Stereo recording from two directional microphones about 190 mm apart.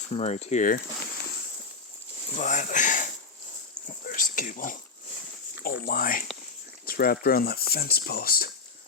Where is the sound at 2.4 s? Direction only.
40° left (ahead or behind).